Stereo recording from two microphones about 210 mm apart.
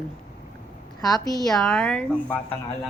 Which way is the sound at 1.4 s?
Centre (ahead or behind).